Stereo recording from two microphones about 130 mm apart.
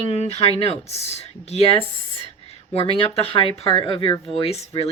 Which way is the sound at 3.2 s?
45° left (ahead or behind).